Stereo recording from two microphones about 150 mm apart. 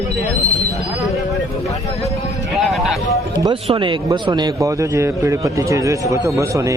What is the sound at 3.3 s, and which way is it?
A man's voice, 30° right (ahead or behind).